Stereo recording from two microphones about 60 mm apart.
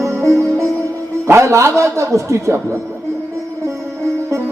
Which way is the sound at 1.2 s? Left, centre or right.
Right.